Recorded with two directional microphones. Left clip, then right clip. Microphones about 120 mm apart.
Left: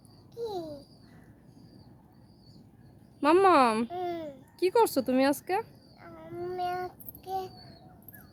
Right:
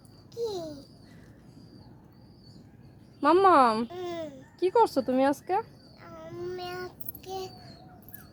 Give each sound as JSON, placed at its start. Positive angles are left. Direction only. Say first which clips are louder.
{"t": 0.3, "sound": "babbling", "louder": "right 3 dB", "side_deg": 20}
{"t": 3.2, "sound": "a child's voice", "louder": "right 2 dB", "side_deg": 25}
{"t": 4.9, "sound": "a sound", "louder": "right 1 dB", "side_deg": 25}